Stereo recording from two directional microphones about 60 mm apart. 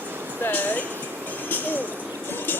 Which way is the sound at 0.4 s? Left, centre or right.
Left.